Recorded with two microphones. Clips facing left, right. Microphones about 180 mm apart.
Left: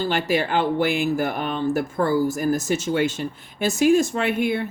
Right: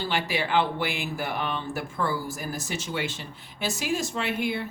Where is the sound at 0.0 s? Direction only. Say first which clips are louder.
Left 6 dB; 45° left (ahead or behind).